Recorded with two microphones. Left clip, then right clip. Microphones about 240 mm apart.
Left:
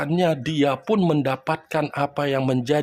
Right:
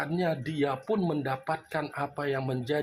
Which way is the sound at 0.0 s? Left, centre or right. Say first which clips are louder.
Left 8 dB; left.